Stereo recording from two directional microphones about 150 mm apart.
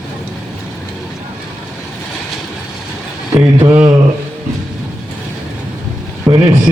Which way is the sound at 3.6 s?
20° right (ahead or behind).